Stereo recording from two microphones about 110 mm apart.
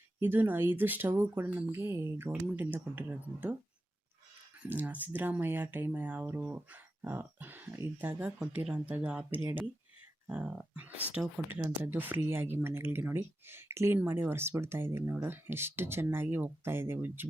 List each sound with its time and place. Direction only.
0.2 s speech: 15° right (ahead or behind)
4.6 s speech: 15° right (ahead or behind)
9.4 s speech: 25° right (ahead or behind)
10.2 s speech: 15° right (ahead or behind)